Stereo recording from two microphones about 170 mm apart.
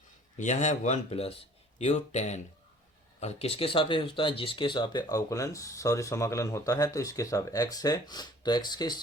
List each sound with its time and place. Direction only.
0.3 s speech: 45° left (ahead or behind); by 9.0 s 25° left (ahead or behind)